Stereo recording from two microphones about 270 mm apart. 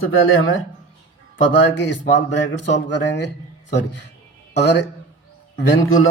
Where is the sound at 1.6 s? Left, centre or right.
Left.